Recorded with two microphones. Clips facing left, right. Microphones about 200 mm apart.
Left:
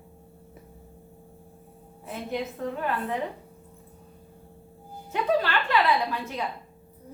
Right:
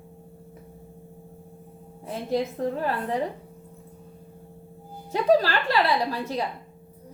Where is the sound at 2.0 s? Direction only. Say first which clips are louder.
Right 5 dB; 35° right (ahead or behind).